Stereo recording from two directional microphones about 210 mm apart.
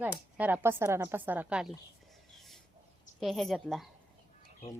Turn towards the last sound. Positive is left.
turn(degrees=0)  # may be behind; listen again after turning